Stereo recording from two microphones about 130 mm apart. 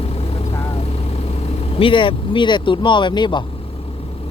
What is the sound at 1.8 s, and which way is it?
Speech, 40° left (ahead or behind).